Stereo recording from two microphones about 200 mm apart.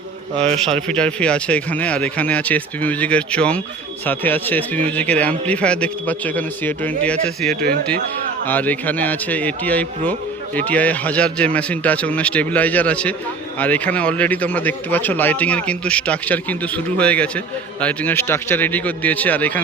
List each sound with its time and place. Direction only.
0.3 s a man's voice: 30° right (ahead or behind)
0.6 s a man's voice: 5° left (ahead or behind)